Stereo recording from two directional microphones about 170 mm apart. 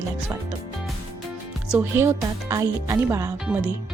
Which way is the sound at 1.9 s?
20° right (ahead or behind).